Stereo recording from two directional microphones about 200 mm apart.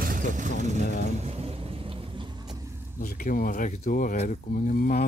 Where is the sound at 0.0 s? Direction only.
40° right (ahead or behind).